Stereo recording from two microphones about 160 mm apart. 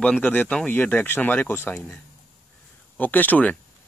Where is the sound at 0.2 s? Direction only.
10° left (ahead or behind).